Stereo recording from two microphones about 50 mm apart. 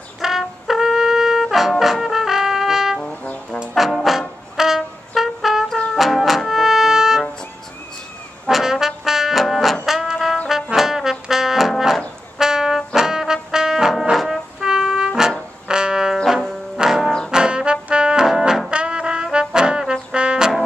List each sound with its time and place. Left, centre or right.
0.2 s brass instrument: centre
5.9 s music: centre
8.5 s brass instrument: centre
10.5 s trombone: centre
12.4 s brass instrument: centre
14.1 s music: centre
14.6 s trumpet: centre
15.7 s music: centre
17.3 s trombone: centre